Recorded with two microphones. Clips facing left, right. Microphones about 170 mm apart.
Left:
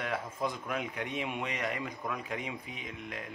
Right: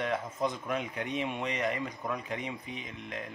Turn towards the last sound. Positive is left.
turn(degrees=0)  # may be behind; listen again after turning